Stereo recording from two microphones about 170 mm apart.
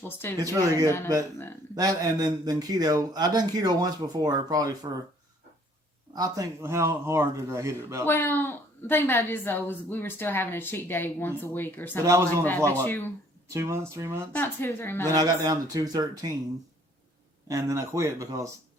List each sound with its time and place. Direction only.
0.4 s speech: 20° right (ahead or behind)
0.9 s a woman's voice: 15° left (ahead or behind)
1.7 s speech: 20° right (ahead or behind)
6.1 s speech: 20° right (ahead or behind)
8.0 s a woman's voice: 10° left (ahead or behind)
12.0 s speech: 15° right (ahead or behind)
12.8 s a woman's voice: 10° left (ahead or behind)
13.5 s speech: 15° right (ahead or behind)
14.3 s a woman's voice: 10° left (ahead or behind)
15.0 s speech: 20° right (ahead or behind)
17.5 s speech: 20° right (ahead or behind)